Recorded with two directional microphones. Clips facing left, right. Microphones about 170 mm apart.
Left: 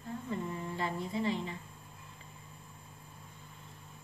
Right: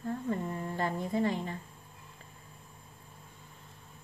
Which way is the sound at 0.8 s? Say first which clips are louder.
Right 5 dB; 50° right (ahead or behind).